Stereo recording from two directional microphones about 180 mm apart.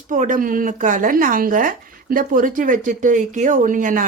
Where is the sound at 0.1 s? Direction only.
45° right (ahead or behind).